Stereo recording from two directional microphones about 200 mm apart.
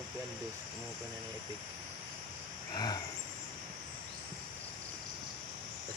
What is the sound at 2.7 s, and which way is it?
Wild animals, 20° left (ahead or behind).